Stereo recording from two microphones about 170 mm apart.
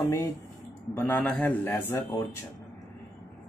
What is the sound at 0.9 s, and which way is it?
Speech, 10° left (ahead or behind).